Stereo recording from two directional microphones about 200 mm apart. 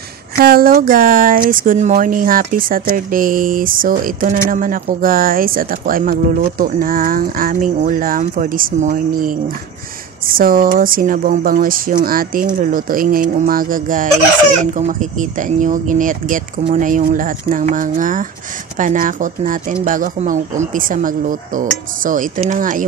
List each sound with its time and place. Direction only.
0.5 s speech: 50° right (ahead or behind)